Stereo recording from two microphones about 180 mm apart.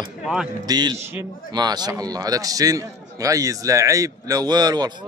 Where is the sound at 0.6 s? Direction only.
25° right (ahead or behind).